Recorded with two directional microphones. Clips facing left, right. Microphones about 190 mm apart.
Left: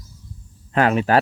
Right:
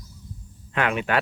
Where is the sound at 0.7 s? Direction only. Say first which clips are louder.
Left 6 dB; 35° left (ahead or behind).